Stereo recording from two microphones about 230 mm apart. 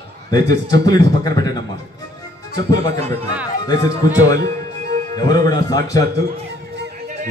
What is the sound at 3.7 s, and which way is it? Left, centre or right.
Speech, centre.